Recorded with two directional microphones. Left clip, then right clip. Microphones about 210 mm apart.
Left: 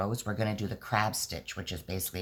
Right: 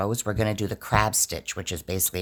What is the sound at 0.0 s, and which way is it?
Speech, 50° right (ahead or behind).